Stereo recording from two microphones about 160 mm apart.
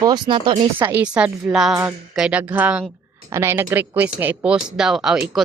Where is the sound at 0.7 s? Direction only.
10° right (ahead or behind).